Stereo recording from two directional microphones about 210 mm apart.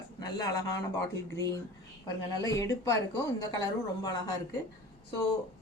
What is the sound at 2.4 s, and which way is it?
Speech, 15° left (ahead or behind).